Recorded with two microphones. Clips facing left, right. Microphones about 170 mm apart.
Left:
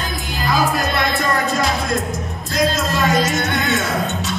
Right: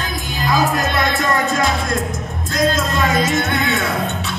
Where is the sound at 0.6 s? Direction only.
Centre (ahead or behind).